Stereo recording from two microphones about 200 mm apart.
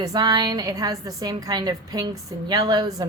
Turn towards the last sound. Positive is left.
turn(degrees=-20)  # may be behind; listen again after turning